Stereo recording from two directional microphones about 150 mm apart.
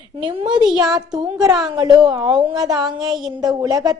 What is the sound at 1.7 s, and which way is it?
A woman's voice, 25° right (ahead or behind).